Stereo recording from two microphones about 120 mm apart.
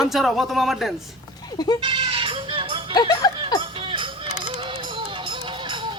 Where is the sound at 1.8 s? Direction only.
45° right (ahead or behind).